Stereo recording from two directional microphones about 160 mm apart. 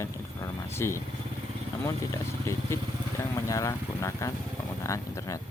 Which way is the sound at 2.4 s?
20° left (ahead or behind).